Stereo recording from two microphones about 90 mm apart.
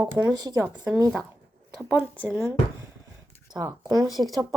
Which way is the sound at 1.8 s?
15° right (ahead or behind).